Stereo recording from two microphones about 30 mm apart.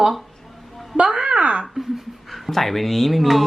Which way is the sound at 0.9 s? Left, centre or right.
Right.